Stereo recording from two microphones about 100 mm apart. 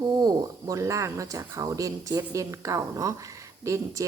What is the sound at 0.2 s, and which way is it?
Speech, 40° right (ahead or behind).